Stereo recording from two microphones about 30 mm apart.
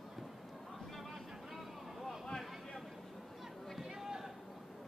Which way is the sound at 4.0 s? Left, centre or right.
Centre.